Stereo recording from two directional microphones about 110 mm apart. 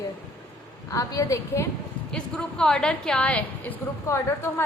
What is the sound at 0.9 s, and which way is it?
Speech, 30° left (ahead or behind).